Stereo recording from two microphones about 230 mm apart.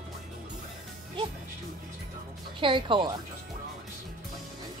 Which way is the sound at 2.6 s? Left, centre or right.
Right.